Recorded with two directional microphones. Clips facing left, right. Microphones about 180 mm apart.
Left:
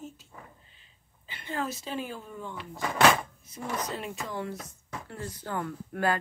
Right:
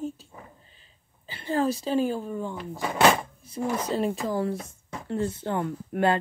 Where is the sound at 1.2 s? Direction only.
35° right (ahead or behind).